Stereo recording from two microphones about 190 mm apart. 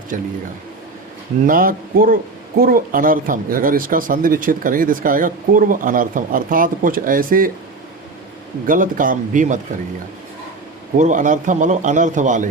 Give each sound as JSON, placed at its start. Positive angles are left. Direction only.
{"t": 0.1, "sound": "speech", "side_deg": -45}
{"t": 1.5, "sound": "speech", "side_deg": -50}
{"t": 8.6, "sound": "speech", "side_deg": -45}
{"t": 10.9, "sound": "a man's voice", "side_deg": -40}